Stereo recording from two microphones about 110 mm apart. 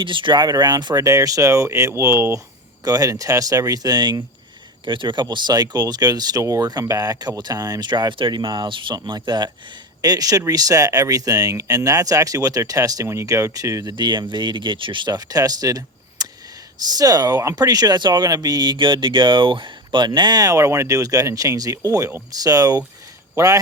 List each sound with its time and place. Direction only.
0.0 s speech: 45° right (ahead or behind); by 13.9 s 30° right (ahead or behind)
13.9 s a man's voice: 45° right (ahead or behind)